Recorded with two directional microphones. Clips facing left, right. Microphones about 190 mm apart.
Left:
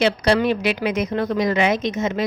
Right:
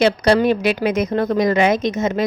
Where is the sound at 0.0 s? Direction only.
45° right (ahead or behind).